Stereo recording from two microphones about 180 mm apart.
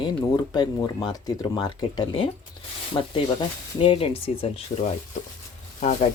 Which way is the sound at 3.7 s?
30° left (ahead or behind).